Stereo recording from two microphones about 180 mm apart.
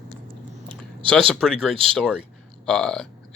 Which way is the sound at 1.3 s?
5° left (ahead or behind).